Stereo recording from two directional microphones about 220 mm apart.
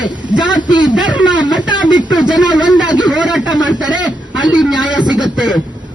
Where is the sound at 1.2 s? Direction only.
20° left (ahead or behind).